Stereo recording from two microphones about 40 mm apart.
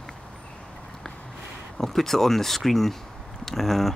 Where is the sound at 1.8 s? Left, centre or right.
Centre.